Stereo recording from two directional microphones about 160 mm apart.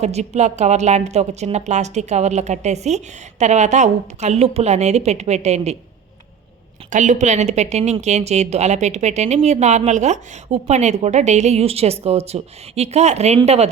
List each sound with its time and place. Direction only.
0.0 s a woman's voice: 45° right (ahead or behind)
6.9 s a woman's voice: 50° right (ahead or behind)